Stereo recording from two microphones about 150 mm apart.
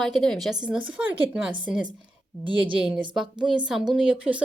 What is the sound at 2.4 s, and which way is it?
Speech, 35° right (ahead or behind).